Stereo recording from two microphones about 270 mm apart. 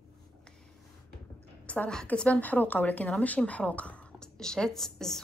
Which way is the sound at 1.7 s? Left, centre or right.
Centre.